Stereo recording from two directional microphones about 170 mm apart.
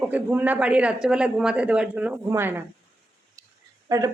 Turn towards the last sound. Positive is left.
turn(degrees=-20)  # may be behind; listen again after turning